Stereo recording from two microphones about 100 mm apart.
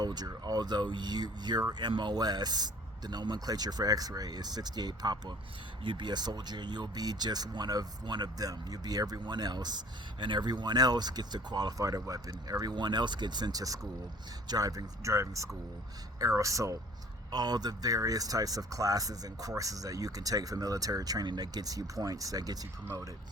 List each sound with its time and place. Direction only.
0.0 s speech: 45° right (ahead or behind)
17.3 s speech: 45° right (ahead or behind)